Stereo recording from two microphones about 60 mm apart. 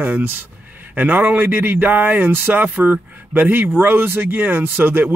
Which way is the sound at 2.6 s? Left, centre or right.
Right.